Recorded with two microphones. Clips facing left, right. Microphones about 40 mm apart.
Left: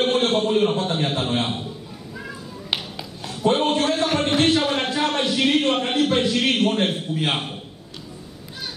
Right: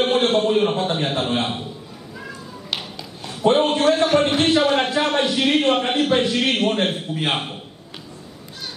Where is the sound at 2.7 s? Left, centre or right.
Centre.